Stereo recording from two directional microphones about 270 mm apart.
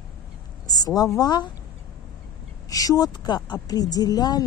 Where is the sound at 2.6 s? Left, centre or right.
Centre.